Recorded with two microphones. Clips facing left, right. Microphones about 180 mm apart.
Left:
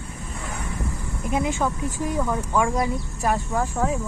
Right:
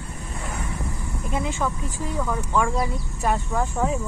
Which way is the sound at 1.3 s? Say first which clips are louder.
Left 3 dB; 15° left (ahead or behind).